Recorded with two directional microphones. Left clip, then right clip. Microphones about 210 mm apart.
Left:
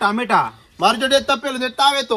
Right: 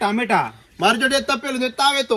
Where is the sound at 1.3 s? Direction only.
45° left (ahead or behind).